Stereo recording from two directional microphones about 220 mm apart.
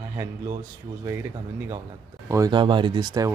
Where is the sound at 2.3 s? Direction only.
15° right (ahead or behind).